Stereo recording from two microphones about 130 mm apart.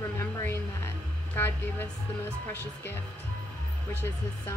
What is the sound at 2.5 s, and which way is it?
Speech, 15° left (ahead or behind).